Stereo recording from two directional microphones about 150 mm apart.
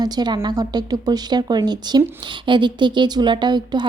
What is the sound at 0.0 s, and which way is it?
A woman's voice, 30° right (ahead or behind).